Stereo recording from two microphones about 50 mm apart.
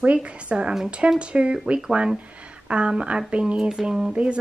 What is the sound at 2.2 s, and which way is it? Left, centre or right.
Speech, right.